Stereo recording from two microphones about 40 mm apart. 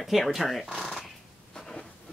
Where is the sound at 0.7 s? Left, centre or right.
Centre.